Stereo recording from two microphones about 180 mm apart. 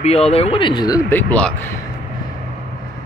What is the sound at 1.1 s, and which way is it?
Speech, 10° left (ahead or behind).